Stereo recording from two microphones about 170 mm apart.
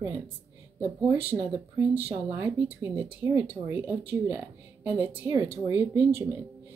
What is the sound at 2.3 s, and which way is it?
A woman's voice, 15° right (ahead or behind).